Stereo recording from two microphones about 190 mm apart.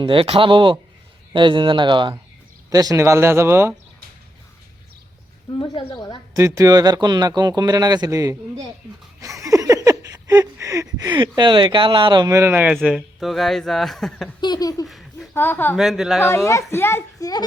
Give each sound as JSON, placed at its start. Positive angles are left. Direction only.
{"t": 0.0, "sound": "speech", "side_deg": -30}
{"t": 5.5, "sound": "speech", "side_deg": 25}
{"t": 6.3, "sound": "speech", "side_deg": -15}
{"t": 9.2, "sound": "a sound", "side_deg": -15}
{"t": 14.4, "sound": "speech", "side_deg": 20}
{"t": 14.8, "sound": "a sound", "side_deg": 0}
{"t": 15.4, "sound": "a child's voice", "side_deg": 10}
{"t": 15.7, "sound": "a man's voice", "side_deg": 0}
{"t": 16.2, "sound": "a child's voice", "side_deg": 15}